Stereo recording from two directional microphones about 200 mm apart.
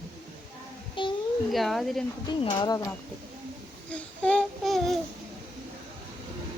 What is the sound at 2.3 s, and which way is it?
Speech, 20° left (ahead or behind).